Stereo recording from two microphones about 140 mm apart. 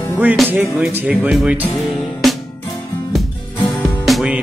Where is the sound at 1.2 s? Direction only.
Centre (ahead or behind).